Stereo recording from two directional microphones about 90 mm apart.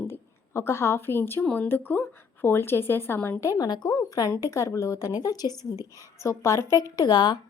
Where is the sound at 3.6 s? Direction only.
45° left (ahead or behind).